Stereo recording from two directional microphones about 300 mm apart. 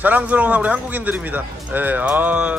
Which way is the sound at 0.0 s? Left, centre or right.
Centre.